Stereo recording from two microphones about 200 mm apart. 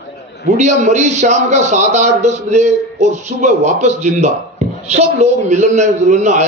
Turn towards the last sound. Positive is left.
turn(degrees=-35)  # may be behind; listen again after turning